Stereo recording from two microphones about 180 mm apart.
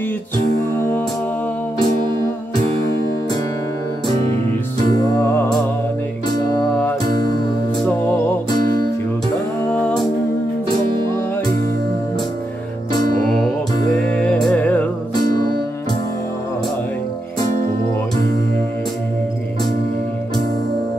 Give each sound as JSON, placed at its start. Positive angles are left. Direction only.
{"t": 4.9, "sound": "music", "side_deg": 20}
{"t": 9.7, "sound": "music", "side_deg": 10}
{"t": 14.2, "sound": "music", "side_deg": 5}